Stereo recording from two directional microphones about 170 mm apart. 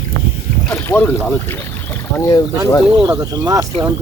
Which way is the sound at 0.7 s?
15° left (ahead or behind).